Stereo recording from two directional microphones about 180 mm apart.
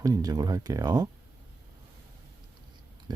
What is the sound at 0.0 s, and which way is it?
Speech, 20° right (ahead or behind).